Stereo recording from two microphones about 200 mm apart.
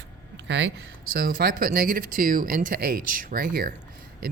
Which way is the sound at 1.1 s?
50° right (ahead or behind).